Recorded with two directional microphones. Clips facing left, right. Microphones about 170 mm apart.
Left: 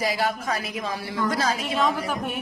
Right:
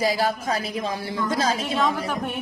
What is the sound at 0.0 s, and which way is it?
A woman's voice, 30° right (ahead or behind).